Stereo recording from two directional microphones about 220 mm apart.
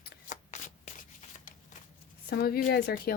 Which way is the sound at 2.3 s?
45° left (ahead or behind).